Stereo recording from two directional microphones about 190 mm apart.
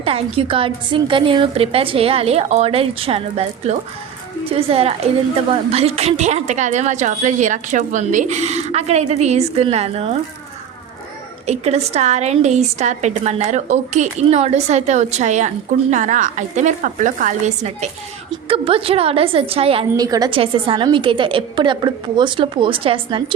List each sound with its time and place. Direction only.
0.0 s a woman's voice: 30° right (ahead or behind)
11.4 s a woman's voice: 35° right (ahead or behind)